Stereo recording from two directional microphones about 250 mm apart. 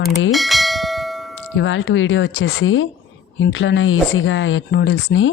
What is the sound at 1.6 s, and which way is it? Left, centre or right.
Speech, left.